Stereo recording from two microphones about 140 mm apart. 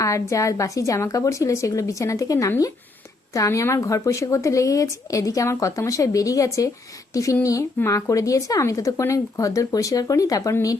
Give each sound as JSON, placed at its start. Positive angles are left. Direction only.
{"t": 0.0, "sound": "speech", "side_deg": 20}